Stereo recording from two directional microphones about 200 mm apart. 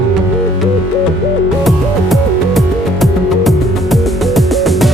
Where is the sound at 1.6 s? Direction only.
Centre (ahead or behind).